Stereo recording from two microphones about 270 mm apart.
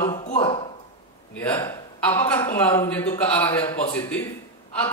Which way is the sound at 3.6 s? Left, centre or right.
Centre.